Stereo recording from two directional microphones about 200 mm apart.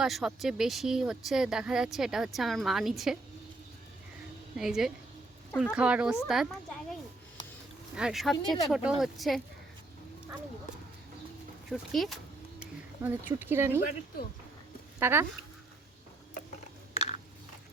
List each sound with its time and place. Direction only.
0.0 s speech: centre (ahead or behind)
4.5 s speech: centre (ahead or behind)
7.9 s speech: centre (ahead or behind)
11.7 s speech: centre (ahead or behind)
13.0 s speech: 10° right (ahead or behind)
14.9 s speech: 10° right (ahead or behind)
16.9 s biting: 30° left (ahead or behind)